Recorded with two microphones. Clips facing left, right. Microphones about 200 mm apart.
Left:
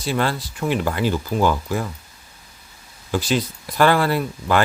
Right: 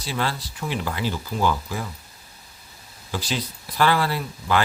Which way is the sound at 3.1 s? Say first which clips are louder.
Left 7 dB; 50° left (ahead or behind).